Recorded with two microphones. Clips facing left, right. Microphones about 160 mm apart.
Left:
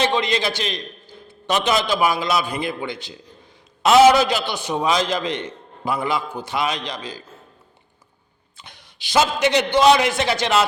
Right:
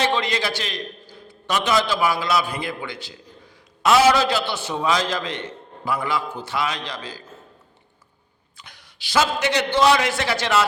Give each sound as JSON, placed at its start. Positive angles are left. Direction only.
{"t": 0.0, "sound": "a man's voice", "side_deg": 20}
{"t": 8.5, "sound": "a man's voice", "side_deg": 25}